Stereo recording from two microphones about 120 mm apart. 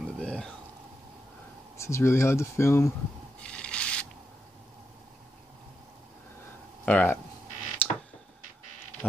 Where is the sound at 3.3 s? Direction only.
10° left (ahead or behind).